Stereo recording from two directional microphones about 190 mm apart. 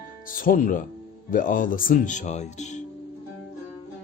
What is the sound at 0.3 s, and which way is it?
Speech, 45° left (ahead or behind).